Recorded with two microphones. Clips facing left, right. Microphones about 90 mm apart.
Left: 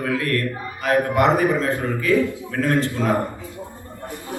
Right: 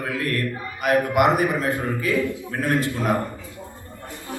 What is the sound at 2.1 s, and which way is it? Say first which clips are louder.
Speech: left 7 dB; 20° left (ahead or behind).